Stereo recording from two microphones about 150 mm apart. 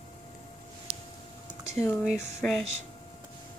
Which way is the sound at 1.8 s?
20° left (ahead or behind).